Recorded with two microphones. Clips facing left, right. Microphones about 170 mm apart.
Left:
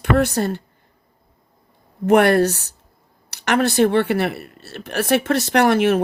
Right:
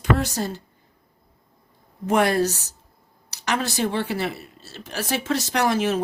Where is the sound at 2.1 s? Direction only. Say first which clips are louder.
Left 6 dB; 60° left (ahead or behind).